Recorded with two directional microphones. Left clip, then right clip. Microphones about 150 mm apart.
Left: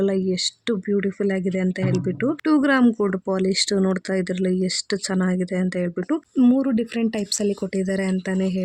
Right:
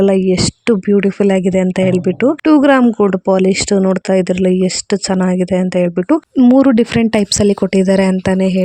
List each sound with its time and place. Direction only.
0.0 s speech: 50° right (ahead or behind)
2.2 s speech: 40° right (ahead or behind)
6.6 s speech: 60° right (ahead or behind)